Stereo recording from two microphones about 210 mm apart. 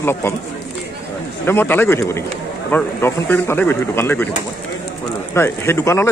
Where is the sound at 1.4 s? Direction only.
10° left (ahead or behind).